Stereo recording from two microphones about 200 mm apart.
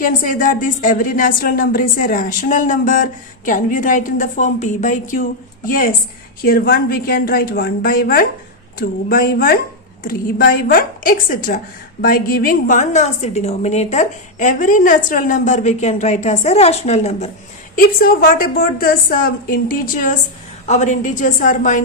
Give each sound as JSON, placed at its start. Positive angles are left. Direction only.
{"t": 0.0, "sound": "a woman's voice", "side_deg": 45}
{"t": 17.7, "sound": "a woman's voice", "side_deg": 45}